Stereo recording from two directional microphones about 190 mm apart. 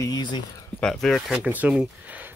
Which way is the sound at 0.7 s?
Centre (ahead or behind).